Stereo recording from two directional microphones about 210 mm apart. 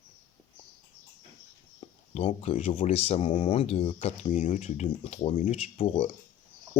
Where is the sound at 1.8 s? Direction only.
30° left (ahead or behind).